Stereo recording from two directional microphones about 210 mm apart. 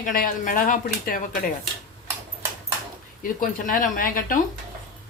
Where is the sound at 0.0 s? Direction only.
40° left (ahead or behind).